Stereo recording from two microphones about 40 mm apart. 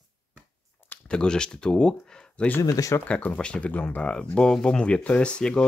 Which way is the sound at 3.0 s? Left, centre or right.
Left.